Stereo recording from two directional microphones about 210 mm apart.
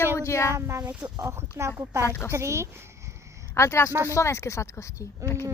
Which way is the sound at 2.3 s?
15° right (ahead or behind).